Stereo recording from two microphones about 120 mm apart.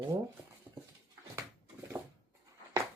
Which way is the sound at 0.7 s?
15° right (ahead or behind).